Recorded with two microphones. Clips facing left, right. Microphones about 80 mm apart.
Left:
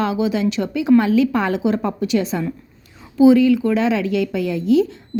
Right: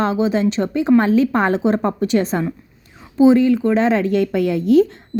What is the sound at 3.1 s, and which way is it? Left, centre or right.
A woman's voice, right.